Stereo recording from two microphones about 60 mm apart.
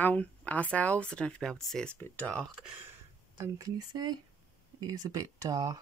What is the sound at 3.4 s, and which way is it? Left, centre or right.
Speech, right.